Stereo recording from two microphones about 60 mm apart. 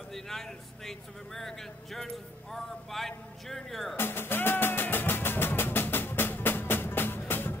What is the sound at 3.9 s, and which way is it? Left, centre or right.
Music, left.